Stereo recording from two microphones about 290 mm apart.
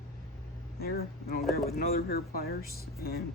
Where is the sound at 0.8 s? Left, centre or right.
Left.